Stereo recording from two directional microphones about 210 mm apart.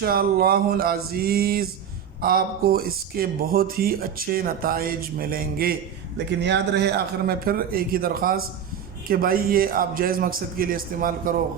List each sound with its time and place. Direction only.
0.0 s speech: 45° right (ahead or behind)